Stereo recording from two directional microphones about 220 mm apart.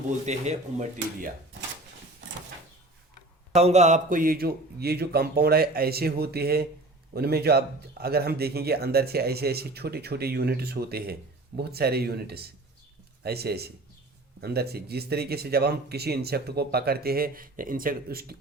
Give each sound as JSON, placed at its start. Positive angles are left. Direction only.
{"t": 0.3, "sound": "speech", "side_deg": -30}
{"t": 3.5, "sound": "speech", "side_deg": -30}